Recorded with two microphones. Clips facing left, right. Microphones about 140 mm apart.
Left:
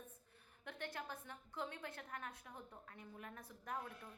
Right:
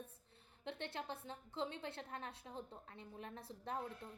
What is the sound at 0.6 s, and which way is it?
A woman's voice, 25° right (ahead or behind).